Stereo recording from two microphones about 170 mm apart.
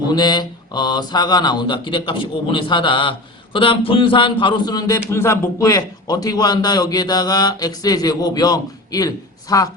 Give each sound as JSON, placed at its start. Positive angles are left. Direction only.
{"t": 0.1, "sound": "speech", "side_deg": 25}